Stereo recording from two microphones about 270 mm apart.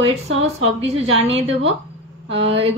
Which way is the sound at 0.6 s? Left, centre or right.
Right.